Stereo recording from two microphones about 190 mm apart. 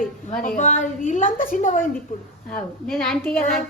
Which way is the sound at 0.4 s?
45° left (ahead or behind).